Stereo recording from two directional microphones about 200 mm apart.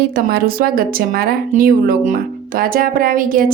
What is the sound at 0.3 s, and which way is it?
A woman's voice, 50° right (ahead or behind).